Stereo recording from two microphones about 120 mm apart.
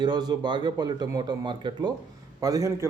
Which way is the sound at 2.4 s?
30° right (ahead or behind).